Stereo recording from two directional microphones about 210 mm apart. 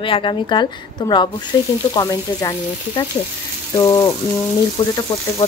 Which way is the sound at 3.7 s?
15° left (ahead or behind).